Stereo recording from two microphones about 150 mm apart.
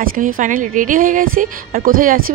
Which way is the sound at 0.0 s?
70° right (ahead or behind).